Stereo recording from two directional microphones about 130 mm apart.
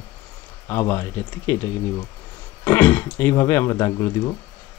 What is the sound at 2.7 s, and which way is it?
Speech, 15° left (ahead or behind).